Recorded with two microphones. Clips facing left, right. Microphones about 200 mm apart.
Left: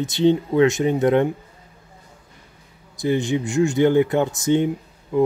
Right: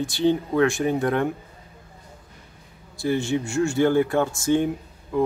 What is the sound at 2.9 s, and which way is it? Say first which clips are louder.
Speech: left 2 dB; 20° left (ahead or behind).